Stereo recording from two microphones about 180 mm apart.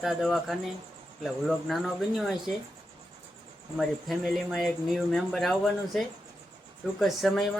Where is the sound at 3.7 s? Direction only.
Centre (ahead or behind).